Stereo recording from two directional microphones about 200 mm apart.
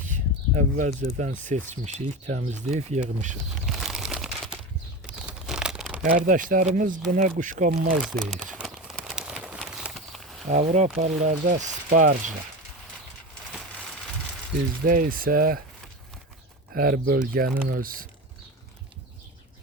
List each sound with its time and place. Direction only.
0.5 s speech: 40° right (ahead or behind)
3.7 s crumpling: centre (ahead or behind)
6.1 s speech: 40° right (ahead or behind)
8.0 s a sound: centre (ahead or behind)
10.5 s speech: 35° right (ahead or behind)
14.8 s speech: 45° right (ahead or behind)
16.7 s speech: 45° right (ahead or behind)